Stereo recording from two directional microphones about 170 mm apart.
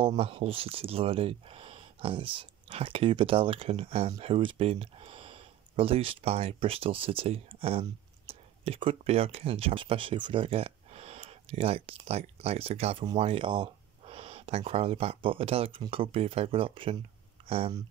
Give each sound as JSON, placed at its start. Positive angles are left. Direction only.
{"t": 0.0, "sound": "speech", "side_deg": -35}